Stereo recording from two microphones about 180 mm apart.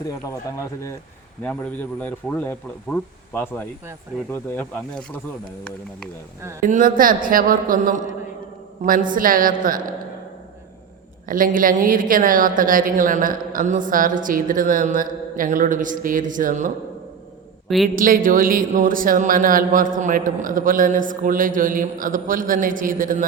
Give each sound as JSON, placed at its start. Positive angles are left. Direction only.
{"t": 1.5, "sound": "speech", "side_deg": 10}
{"t": 6.6, "sound": "a woman's voice", "side_deg": -50}
{"t": 11.3, "sound": "a woman's voice", "side_deg": -50}
{"t": 17.9, "sound": "a woman's voice", "side_deg": -50}